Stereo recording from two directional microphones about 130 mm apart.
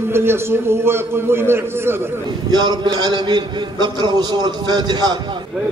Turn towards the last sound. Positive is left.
turn(degrees=-35)  # may be behind; listen again after turning